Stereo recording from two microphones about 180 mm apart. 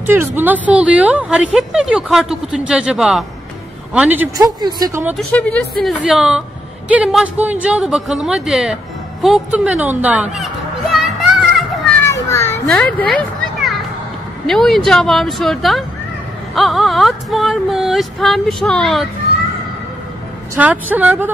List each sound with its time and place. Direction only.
0.0 s a woman's voice: 10° right (ahead or behind)
4.4 s a woman's voice: 20° right (ahead or behind)
5.1 s speech: 5° left (ahead or behind)
9.2 s a sound: 5° right (ahead or behind)
12.1 s children playing: 15° left (ahead or behind)
12.6 s speech: 5° left (ahead or behind)
20.5 s a woman's voice: 10° right (ahead or behind)